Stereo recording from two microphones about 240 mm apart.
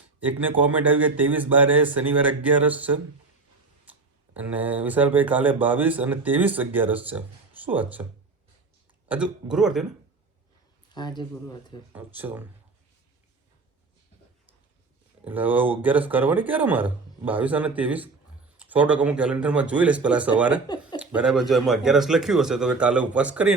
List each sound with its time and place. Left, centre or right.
0.2 s speech: centre
4.4 s speech: centre
9.0 s speech: centre
10.9 s speech: centre
11.9 s speech: centre
15.2 s speech: centre